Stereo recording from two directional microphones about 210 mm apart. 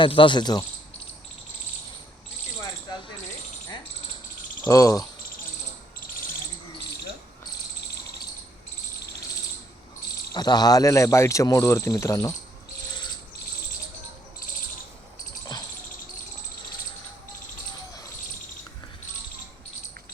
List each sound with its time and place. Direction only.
0.0 s cricket: 25° left (ahead or behind)
4.6 s speech: 15° left (ahead or behind)
10.3 s speech: 20° left (ahead or behind)